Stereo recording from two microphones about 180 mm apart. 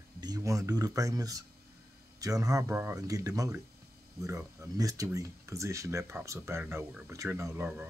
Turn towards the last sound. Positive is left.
turn(degrees=-10)  # may be behind; listen again after turning